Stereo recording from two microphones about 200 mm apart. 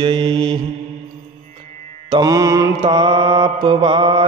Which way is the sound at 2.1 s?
20° right (ahead or behind).